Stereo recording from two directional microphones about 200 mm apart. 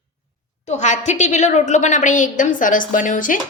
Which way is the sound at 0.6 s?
35° left (ahead or behind).